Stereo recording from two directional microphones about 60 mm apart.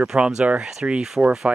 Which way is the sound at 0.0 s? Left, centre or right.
Centre.